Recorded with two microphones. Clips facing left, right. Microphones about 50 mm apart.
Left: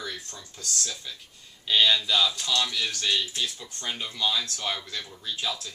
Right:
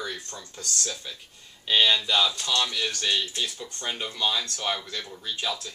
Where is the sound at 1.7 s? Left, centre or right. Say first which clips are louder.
Even; centre.